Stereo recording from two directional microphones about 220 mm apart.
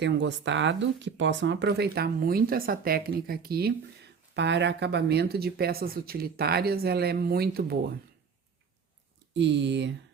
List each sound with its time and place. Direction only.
0.0 s speech: 55° right (ahead or behind)
9.3 s speech: 55° right (ahead or behind)